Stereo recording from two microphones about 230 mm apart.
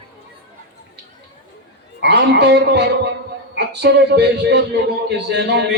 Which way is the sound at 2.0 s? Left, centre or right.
Right.